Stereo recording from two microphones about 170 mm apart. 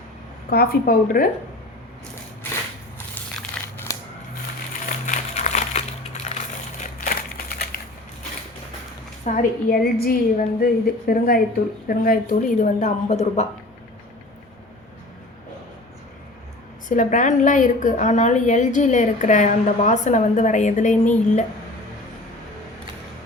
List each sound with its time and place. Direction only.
0.5 s a woman's voice: 60° left (ahead or behind)
3.6 s crushing: 5° left (ahead or behind)
5.0 s crushing: 45° left (ahead or behind)
7.0 s crumpling: 60° left (ahead or behind)
9.2 s a woman's voice: 50° left (ahead or behind)
16.9 s a woman's voice: 45° left (ahead or behind)